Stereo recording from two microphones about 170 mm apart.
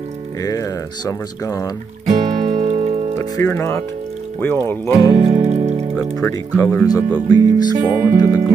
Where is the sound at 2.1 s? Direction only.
40° right (ahead or behind).